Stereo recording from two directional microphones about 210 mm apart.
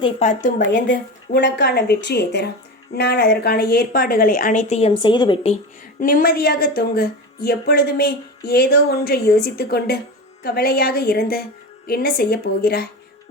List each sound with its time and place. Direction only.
0.0 s a woman's voice: 35° left (ahead or behind)
1.4 s a woman's voice: 55° left (ahead or behind); by 5.5 s 25° left (ahead or behind)
6.0 s a woman's voice: 40° left (ahead or behind)